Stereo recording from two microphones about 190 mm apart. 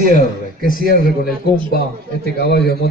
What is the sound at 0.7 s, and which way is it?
Speech, 50° left (ahead or behind).